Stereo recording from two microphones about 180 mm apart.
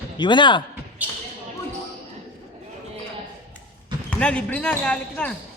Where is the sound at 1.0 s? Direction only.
10° right (ahead or behind).